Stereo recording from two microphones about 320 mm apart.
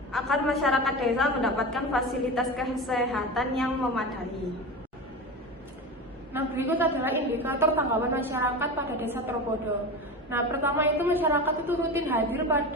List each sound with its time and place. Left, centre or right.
0.1 s a woman's voice: centre
6.3 s a woman's voice: centre